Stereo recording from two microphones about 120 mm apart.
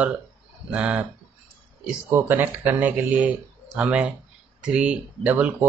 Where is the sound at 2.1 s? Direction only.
15° right (ahead or behind).